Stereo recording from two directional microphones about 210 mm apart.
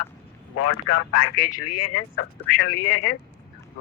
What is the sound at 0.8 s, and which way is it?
Speech, 90° left.